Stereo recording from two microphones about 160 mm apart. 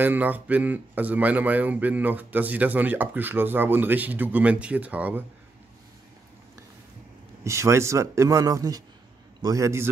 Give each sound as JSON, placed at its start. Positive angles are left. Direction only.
{"t": 0.0, "sound": "speech", "side_deg": -10}
{"t": 7.4, "sound": "a man's voice", "side_deg": -20}